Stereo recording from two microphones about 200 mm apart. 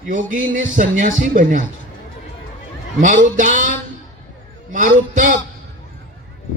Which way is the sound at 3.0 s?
40° right (ahead or behind).